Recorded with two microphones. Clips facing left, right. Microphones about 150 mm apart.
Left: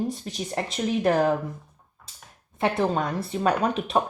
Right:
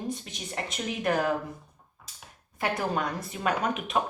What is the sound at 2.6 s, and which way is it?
Speech, 25° left (ahead or behind).